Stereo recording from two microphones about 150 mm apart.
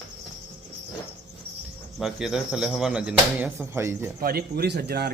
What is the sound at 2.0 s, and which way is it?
Speech, 5° right (ahead or behind).